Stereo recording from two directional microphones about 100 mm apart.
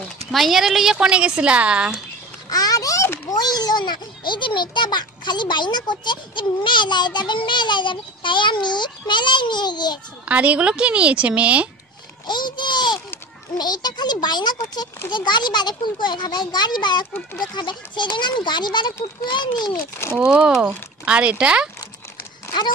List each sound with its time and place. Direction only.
0.3 s a woman's voice: centre (ahead or behind)
2.5 s a sound: 40° left (ahead or behind)
3.3 s a child's voice: 40° left (ahead or behind)
10.2 s a woman's voice: 15° right (ahead or behind)
12.3 s a sound: 50° left (ahead or behind)
13.6 s a child's voice: 45° left (ahead or behind)
20.2 s a woman's voice: 10° right (ahead or behind)